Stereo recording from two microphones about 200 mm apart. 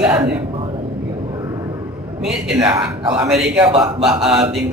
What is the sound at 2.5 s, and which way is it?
Speech, 15° right (ahead or behind).